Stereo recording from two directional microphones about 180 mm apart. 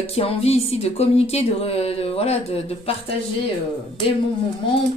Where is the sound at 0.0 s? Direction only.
35° left (ahead or behind).